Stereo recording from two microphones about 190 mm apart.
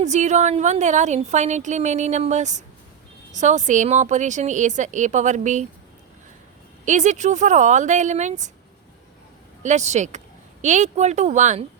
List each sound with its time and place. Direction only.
0.0 s a woman's voice: 40° right (ahead or behind)
6.8 s a woman's voice: 40° right (ahead or behind)
9.6 s a woman's voice: 35° right (ahead or behind)